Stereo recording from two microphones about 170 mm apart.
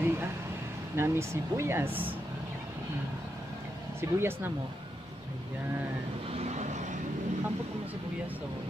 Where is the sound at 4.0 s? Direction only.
15° right (ahead or behind).